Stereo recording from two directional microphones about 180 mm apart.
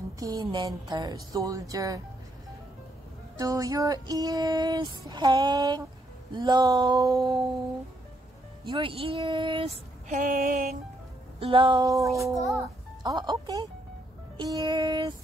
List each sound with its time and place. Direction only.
0.2 s music: 25° right (ahead or behind)
3.3 s music: 20° right (ahead or behind)
8.6 s music: 30° right (ahead or behind)
10.0 s a sound: 50° right (ahead or behind)
11.3 s music: 30° right (ahead or behind)
12.1 s speech: centre (ahead or behind)
13.0 s music: 25° right (ahead or behind)